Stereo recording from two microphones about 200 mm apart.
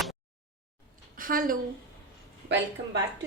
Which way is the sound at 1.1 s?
45° right (ahead or behind).